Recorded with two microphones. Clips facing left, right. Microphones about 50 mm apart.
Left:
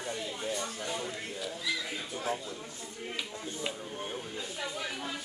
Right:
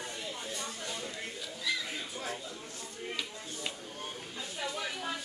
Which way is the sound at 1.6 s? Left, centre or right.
Centre.